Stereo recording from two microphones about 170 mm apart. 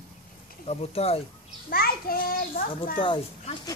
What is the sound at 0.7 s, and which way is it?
Speech, 35° left (ahead or behind).